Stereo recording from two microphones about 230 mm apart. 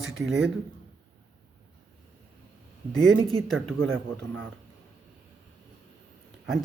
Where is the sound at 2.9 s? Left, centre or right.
Centre.